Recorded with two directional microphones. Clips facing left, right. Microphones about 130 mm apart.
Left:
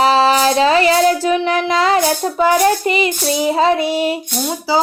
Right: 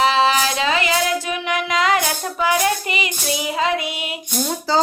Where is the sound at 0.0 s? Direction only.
35° left (ahead or behind).